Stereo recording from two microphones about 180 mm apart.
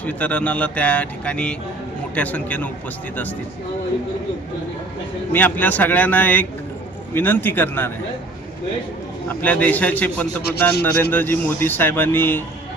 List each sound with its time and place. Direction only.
0.0 s speech: 10° left (ahead or behind)
5.3 s speech: 10° left (ahead or behind)
9.3 s speech: 10° left (ahead or behind)
10.4 s speech: 60° left (ahead or behind)
10.9 s speech: 10° left (ahead or behind)